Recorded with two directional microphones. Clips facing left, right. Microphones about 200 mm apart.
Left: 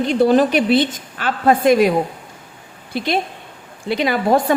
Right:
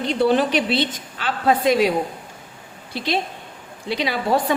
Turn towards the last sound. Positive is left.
turn(degrees=50)  # may be behind; listen again after turning